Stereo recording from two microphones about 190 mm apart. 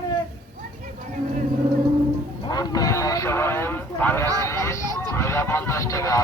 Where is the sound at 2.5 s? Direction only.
20° left (ahead or behind).